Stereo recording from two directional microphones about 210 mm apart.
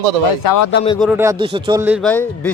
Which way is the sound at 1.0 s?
5° right (ahead or behind).